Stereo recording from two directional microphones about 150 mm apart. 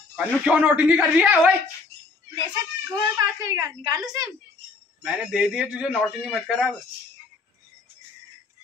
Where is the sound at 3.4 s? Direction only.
20° right (ahead or behind).